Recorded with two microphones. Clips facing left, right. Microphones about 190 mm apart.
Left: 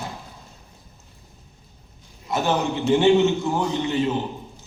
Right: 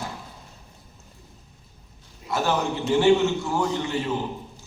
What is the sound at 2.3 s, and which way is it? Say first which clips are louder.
A man's voice: left 2 dB; 20° left (ahead or behind).